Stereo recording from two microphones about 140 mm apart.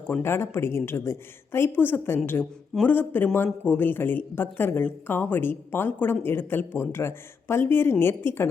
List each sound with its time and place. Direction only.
0.1 s speech: 15° left (ahead or behind)